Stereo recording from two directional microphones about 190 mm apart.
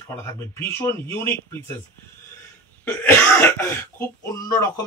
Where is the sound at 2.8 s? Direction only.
10° left (ahead or behind).